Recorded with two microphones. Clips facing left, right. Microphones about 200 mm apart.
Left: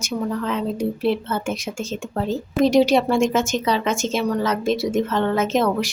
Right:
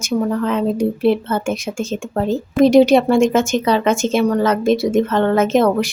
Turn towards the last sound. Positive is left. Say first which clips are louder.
# right 5 dB
turn(degrees=-55)  # may be behind; listen again after turning